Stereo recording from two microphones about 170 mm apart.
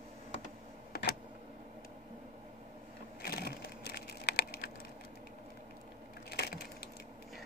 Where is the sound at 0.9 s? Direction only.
65° left (ahead or behind).